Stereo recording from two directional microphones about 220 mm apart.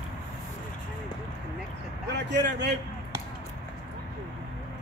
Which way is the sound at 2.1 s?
50° right (ahead or behind).